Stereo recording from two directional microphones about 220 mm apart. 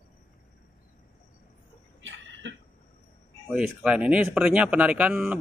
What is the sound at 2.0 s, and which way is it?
Cough, 60° right (ahead or behind).